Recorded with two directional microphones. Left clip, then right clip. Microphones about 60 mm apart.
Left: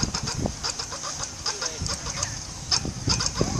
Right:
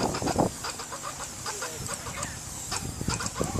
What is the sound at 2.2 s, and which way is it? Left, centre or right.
Fowl, left.